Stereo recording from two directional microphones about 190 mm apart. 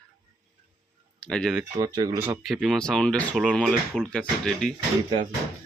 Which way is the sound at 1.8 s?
20° right (ahead or behind).